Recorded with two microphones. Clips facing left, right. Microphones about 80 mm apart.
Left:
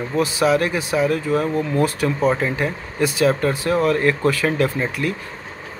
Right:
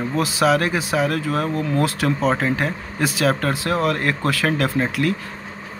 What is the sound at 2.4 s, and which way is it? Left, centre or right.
Speech, right.